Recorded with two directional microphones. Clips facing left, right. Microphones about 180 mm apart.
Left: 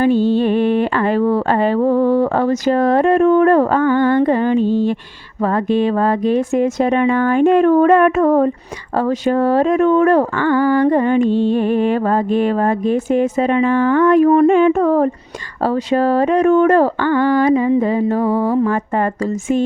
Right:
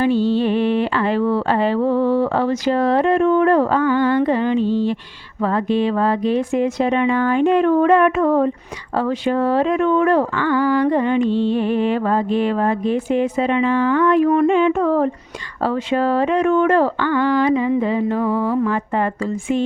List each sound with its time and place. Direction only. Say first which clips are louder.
0.0 s speech: left 3 dB; 50° left (ahead or behind)